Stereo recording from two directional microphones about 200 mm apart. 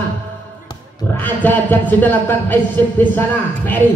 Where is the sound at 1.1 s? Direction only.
10° left (ahead or behind).